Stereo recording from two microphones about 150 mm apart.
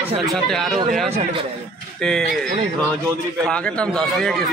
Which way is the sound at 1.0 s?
45° right (ahead or behind).